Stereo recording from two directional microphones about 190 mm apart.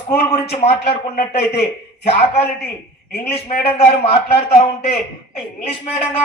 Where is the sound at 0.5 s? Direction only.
30° left (ahead or behind).